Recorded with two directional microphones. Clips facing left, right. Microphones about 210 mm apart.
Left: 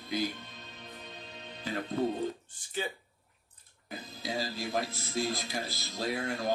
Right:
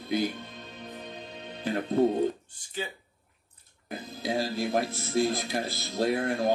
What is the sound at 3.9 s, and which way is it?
Speech, 60° right (ahead or behind).